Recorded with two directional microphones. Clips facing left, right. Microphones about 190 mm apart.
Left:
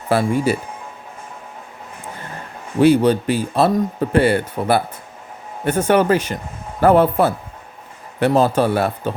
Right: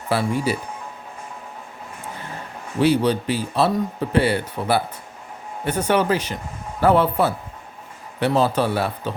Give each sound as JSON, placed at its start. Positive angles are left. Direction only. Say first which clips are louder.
{"t": 0.1, "sound": "speech", "louder": "left 4 dB", "side_deg": 50}
{"t": 2.8, "sound": "speech", "louder": "left 5 dB", "side_deg": 50}